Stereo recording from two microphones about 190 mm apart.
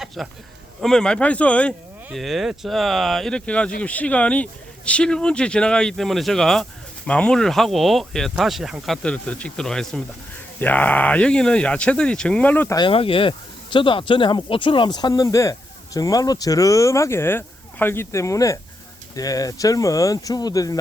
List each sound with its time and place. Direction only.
0.2 s speech: centre (ahead or behind)
12.7 s speech: 25° left (ahead or behind)